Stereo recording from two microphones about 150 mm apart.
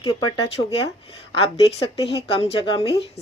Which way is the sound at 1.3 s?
40° left (ahead or behind).